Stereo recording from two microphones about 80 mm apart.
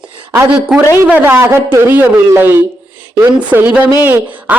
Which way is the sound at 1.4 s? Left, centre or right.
Right.